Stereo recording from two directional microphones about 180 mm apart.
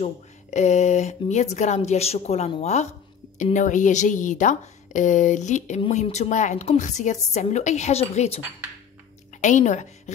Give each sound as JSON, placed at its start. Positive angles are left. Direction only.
{"t": 0.0, "sound": "a woman's voice", "side_deg": 40}
{"t": 9.4, "sound": "a woman's voice", "side_deg": 45}